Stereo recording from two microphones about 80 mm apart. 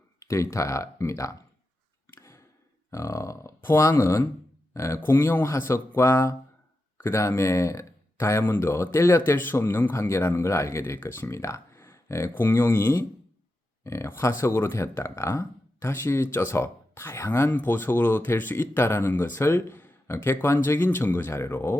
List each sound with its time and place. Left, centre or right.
0.2 s speech: left
2.0 s a sound: left
2.9 s speech: left